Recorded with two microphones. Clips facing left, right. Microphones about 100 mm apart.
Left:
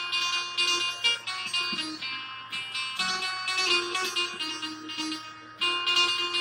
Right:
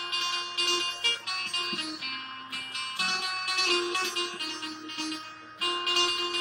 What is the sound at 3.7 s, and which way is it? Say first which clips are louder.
Music: right 3 dB; 40° right (ahead or behind).